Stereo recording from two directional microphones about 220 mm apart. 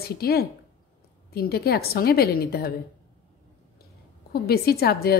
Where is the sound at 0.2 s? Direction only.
45° left (ahead or behind).